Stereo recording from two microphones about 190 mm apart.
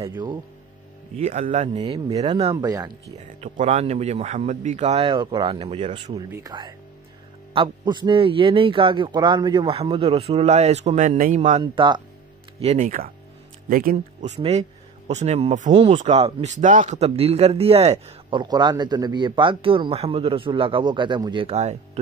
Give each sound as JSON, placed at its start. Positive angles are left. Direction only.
{"t": 1.1, "sound": "speech", "side_deg": -35}
{"t": 1.9, "sound": "speech", "side_deg": -20}
{"t": 2.2, "sound": "speech", "side_deg": -30}
{"t": 2.5, "sound": "speech", "side_deg": -20}
{"t": 3.2, "sound": "speech", "side_deg": -40}
{"t": 6.1, "sound": "speech", "side_deg": -20}
{"t": 11.6, "sound": "speech", "side_deg": -25}
{"t": 12.8, "sound": "speech", "side_deg": -45}
{"t": 18.4, "sound": "speech", "side_deg": -20}